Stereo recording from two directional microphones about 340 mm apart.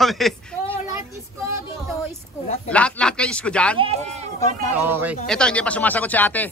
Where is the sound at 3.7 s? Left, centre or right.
Centre.